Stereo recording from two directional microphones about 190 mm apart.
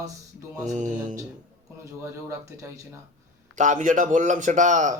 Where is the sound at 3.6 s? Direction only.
40° right (ahead or behind).